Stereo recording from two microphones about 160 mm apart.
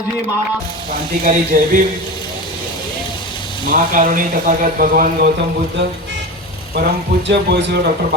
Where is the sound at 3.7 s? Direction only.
60° right (ahead or behind).